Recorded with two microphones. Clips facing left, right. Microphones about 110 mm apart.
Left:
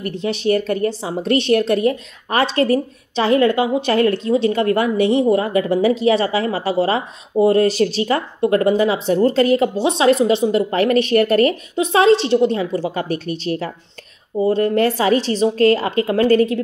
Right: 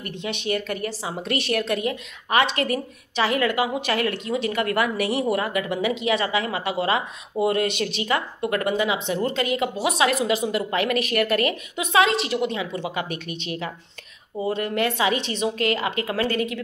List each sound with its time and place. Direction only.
0.0 s a woman's voice: 35° left (ahead or behind)